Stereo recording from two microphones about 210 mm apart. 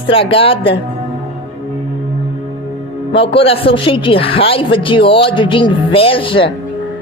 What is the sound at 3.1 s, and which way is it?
Speech, 25° left (ahead or behind).